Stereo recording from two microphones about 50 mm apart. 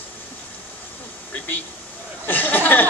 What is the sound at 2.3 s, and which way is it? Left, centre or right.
Speech, left.